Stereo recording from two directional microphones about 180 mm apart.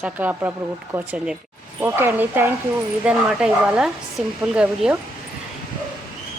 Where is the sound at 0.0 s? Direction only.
10° right (ahead or behind).